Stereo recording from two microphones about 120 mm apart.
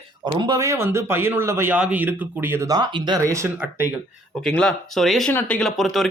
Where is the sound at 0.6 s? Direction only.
25° right (ahead or behind).